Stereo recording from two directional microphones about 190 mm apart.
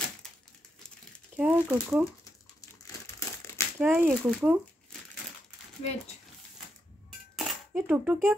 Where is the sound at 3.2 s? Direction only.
15° left (ahead or behind).